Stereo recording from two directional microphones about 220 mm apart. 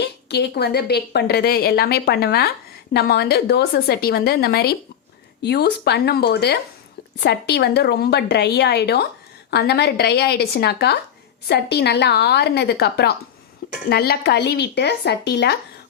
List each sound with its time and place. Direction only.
0.0 s a woman's voice: 50° left (ahead or behind)